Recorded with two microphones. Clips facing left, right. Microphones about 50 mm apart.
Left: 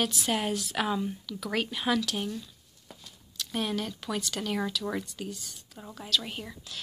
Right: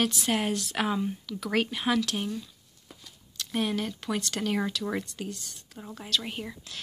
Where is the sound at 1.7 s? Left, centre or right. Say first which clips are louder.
Right 1 dB; centre.